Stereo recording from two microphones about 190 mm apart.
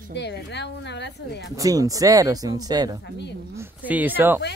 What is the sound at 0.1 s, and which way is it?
A woman's voice, 65° left (ahead or behind).